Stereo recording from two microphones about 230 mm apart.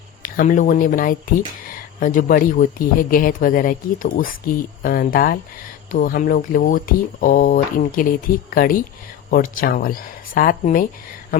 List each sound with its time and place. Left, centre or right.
0.2 s speech: left